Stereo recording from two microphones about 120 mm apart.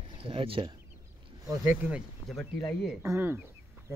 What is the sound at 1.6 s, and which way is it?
Speech, 15° right (ahead or behind).